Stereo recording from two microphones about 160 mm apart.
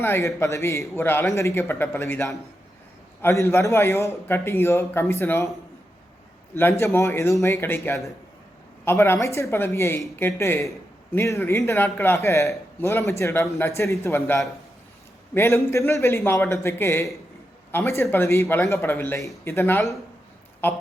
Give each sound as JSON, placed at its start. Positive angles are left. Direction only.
{"t": 0.0, "sound": "a man's voice", "side_deg": 15}
{"t": 6.5, "sound": "a man's voice", "side_deg": 15}